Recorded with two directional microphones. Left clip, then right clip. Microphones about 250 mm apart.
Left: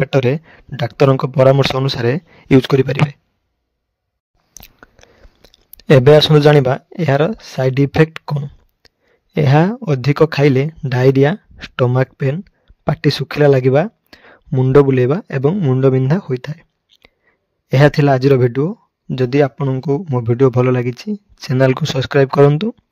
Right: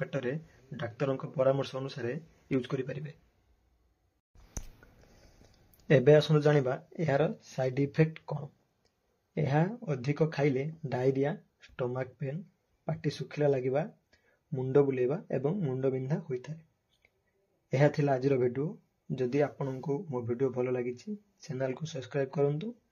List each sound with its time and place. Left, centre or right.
0.0 s speech: left
5.8 s speech: left
17.6 s speech: left